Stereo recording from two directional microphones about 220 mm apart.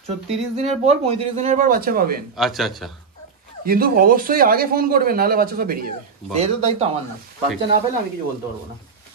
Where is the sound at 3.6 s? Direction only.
40° right (ahead or behind).